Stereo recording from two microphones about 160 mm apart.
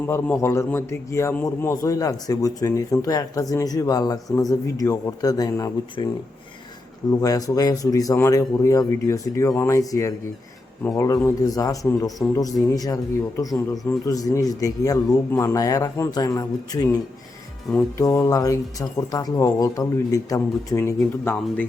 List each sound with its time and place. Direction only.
0.1 s a man's voice: 15° left (ahead or behind)
7.1 s a man's voice: 20° left (ahead or behind)
14.1 s a man's voice: 20° left (ahead or behind)
17.7 s music: 10° left (ahead or behind)
18.0 s a man's voice: 20° left (ahead or behind)
21.4 s music: 5° left (ahead or behind)